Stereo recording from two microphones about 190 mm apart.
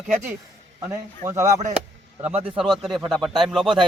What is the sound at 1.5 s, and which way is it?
Speech, 40° right (ahead or behind).